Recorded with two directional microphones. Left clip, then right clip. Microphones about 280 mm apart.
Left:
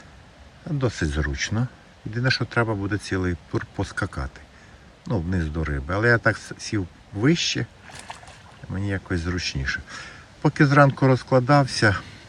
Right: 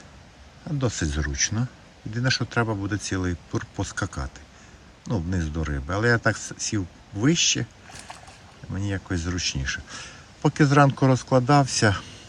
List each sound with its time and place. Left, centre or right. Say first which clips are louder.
0.8 s speech: left 2 dB; centre
7.9 s rowboat: left 2 dB; centre
8.7 s a man's voice: left 2 dB; centre